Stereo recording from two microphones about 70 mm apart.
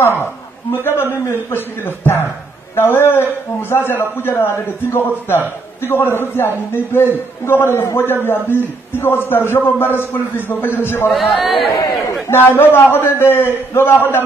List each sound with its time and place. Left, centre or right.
0.7 s a man's voice: left
5.8 s a man's voice: left
11.1 s speech: centre
11.7 s a man's voice: left
12.4 s a man's voice: left